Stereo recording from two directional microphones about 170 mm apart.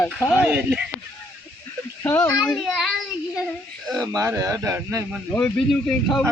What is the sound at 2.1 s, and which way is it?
Speech, 15° left (ahead or behind).